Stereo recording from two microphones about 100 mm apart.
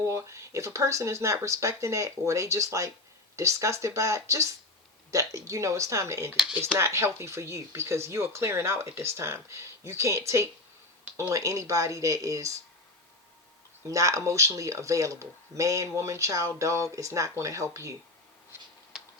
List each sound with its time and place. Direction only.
0.0 s speech: 30° right (ahead or behind)
6.3 s speech: 5° right (ahead or behind)
6.7 s speech: 30° right (ahead or behind)
13.8 s speech: 35° right (ahead or behind)
18.9 s a sound: 5° right (ahead or behind)